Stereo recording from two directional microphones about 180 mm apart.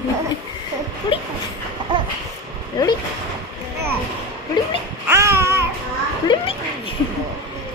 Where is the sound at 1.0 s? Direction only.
25° left (ahead or behind).